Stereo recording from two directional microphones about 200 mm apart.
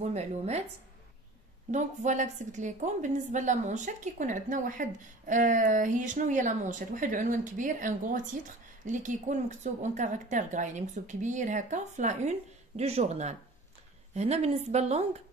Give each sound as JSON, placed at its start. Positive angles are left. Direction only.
{"t": 0.0, "sound": "a woman's voice", "side_deg": -35}
{"t": 1.7, "sound": "a woman's voice", "side_deg": -35}